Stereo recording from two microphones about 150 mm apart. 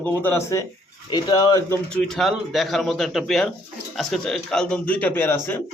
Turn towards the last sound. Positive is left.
turn(degrees=15)  # may be behind; listen again after turning